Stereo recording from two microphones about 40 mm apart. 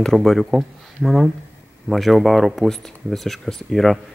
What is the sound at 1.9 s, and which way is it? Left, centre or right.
Speech, centre.